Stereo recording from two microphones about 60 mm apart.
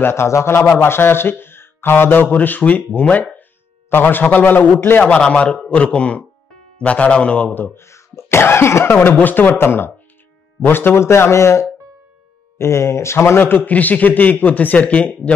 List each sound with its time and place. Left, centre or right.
0.0 s a man's voice: left
5.0 s a man's voice: centre
7.5 s speech: left
7.8 s speech: left
12.5 s speech: left
13.4 s a man's voice: left